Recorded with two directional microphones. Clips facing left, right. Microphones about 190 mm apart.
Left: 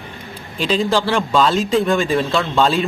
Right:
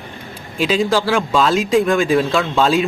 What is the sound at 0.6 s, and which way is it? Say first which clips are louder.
Speech: right 1 dB; 5° right (ahead or behind).